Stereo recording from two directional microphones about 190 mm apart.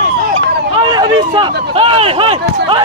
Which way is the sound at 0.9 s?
25° right (ahead or behind).